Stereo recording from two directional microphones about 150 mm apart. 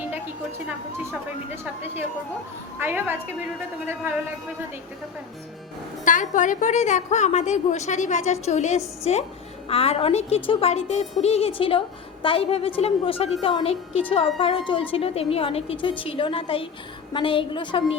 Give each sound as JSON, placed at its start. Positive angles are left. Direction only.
{"t": 2.7, "sound": "a man's voice", "side_deg": -15}
{"t": 6.1, "sound": "a woman's voice", "side_deg": 60}